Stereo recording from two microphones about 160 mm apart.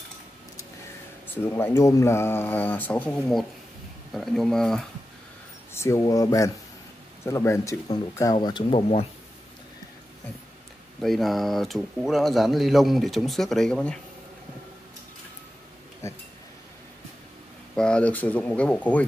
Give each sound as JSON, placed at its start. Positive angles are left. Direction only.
{"t": 1.3, "sound": "speech", "side_deg": 15}
{"t": 5.7, "sound": "speech", "side_deg": 15}
{"t": 11.0, "sound": "speech", "side_deg": 0}
{"t": 16.0, "sound": "speech", "side_deg": 20}
{"t": 17.7, "sound": "speech", "side_deg": 5}